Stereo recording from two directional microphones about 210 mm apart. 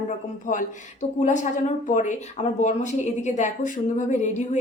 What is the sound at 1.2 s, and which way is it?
A woman's voice, 35° left (ahead or behind).